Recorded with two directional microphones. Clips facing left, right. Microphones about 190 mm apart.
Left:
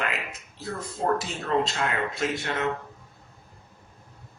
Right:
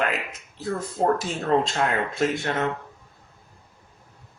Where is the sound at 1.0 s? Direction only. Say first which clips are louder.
Right 3 dB; 50° right (ahead or behind).